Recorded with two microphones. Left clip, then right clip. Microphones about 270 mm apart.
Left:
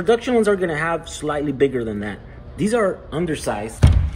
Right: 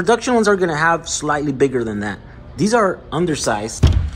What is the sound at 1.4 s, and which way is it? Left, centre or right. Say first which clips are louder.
A man's voice: right 2 dB; centre.